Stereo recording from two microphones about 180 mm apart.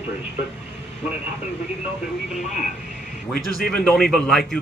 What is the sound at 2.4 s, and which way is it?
Speech, 40° left (ahead or behind).